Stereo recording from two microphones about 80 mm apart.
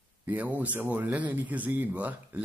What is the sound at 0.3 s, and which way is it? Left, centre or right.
Speech, right.